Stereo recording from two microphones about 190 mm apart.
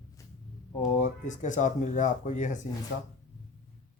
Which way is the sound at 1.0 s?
40° left (ahead or behind).